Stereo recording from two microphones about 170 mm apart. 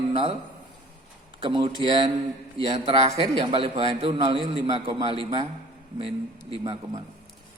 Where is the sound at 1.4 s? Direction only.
30° right (ahead or behind).